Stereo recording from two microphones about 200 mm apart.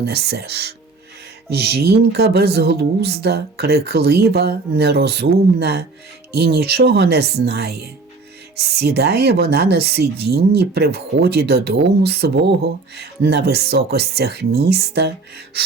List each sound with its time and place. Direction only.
0.0 s speech: 55° right (ahead or behind)